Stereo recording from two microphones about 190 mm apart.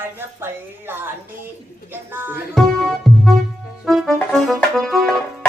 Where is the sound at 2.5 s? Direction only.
5° left (ahead or behind).